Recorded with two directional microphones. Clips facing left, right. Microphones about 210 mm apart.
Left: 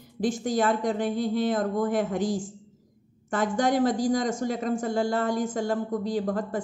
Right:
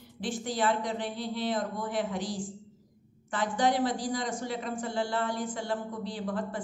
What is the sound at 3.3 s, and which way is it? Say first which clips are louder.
Speech: left 4 dB; 45° left (ahead or behind).